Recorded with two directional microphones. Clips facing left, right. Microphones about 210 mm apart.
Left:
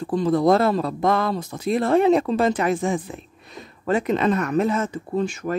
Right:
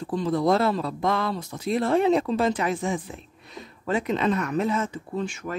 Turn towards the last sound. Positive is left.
turn(degrees=40)  # may be behind; listen again after turning